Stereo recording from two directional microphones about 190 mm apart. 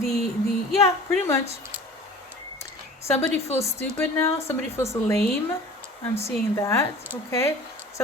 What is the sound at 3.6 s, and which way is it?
A woman's voice, 15° left (ahead or behind).